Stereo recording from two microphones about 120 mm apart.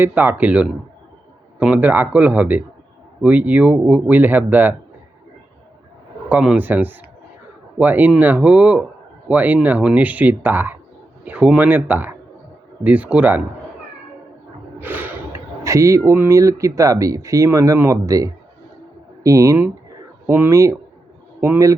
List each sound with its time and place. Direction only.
0.0 s speech: 15° right (ahead or behind)
6.2 s speech: 10° right (ahead or behind)
14.8 s speech: 15° right (ahead or behind)